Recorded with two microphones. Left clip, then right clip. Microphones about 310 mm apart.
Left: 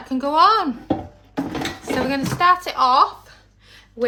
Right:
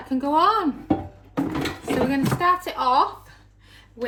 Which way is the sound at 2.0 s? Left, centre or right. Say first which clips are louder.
Left 5 dB; centre.